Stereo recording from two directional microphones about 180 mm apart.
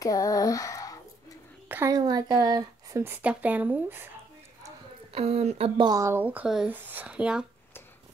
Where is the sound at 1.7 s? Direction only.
20° right (ahead or behind).